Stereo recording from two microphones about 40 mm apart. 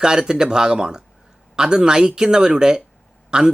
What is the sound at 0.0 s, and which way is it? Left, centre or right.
Speech, centre.